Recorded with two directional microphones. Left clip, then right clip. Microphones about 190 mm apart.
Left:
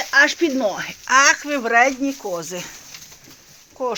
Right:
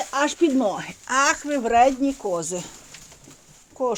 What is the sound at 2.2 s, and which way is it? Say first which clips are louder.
Speech: right 1 dB; 10° right (ahead or behind).